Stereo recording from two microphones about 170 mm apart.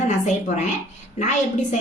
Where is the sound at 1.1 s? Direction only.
45° left (ahead or behind).